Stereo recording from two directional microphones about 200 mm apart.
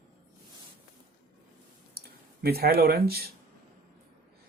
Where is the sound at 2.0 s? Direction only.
50° right (ahead or behind).